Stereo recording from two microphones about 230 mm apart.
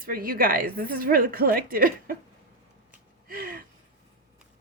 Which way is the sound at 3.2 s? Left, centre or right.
Right.